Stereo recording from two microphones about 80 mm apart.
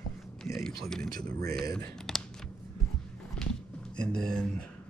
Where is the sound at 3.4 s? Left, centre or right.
Centre.